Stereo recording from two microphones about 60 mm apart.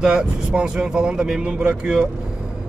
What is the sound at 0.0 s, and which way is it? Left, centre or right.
A man's voice, centre.